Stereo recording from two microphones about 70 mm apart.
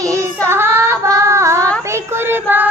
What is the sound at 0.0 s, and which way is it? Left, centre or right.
Child singing, right.